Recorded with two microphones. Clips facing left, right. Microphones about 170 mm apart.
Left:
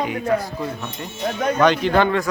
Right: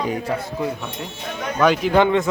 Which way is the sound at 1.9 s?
20° right (ahead or behind).